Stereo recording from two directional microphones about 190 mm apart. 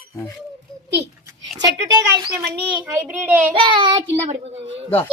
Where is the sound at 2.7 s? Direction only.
10° right (ahead or behind).